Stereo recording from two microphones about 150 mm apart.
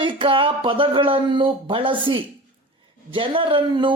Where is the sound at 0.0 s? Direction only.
35° right (ahead or behind).